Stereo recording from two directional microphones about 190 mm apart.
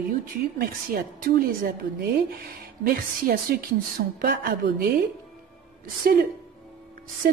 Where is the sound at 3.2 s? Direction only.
50° right (ahead or behind).